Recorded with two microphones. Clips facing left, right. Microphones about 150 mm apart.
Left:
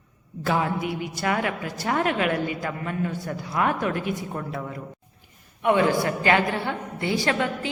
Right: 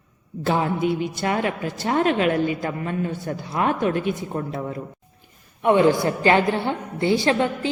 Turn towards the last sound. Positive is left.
turn(degrees=-30)  # may be behind; listen again after turning